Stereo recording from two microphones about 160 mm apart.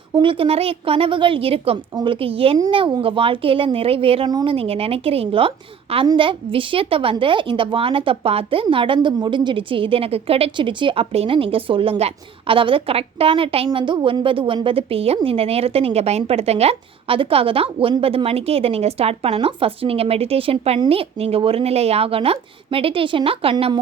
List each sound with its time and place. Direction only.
0.1 s a woman's voice: 30° right (ahead or behind)